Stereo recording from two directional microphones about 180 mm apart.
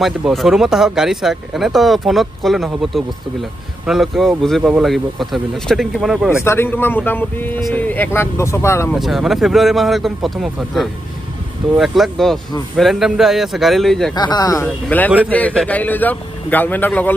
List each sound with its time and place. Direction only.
0.0 s speech: centre (ahead or behind)
6.4 s a man's voice: 15° left (ahead or behind)
8.9 s speech: centre (ahead or behind)
14.1 s a man's voice: 20° left (ahead or behind)